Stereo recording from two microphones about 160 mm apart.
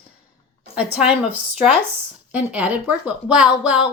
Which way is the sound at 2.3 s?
10° right (ahead or behind).